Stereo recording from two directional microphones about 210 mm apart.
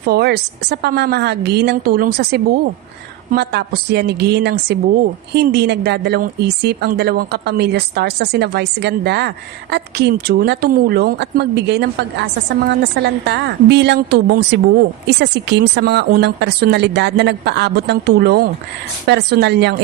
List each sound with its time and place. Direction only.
0.0 s a woman's voice: 50° right (ahead or behind)